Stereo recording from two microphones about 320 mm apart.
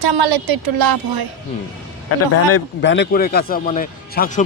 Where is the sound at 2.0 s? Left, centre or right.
Left.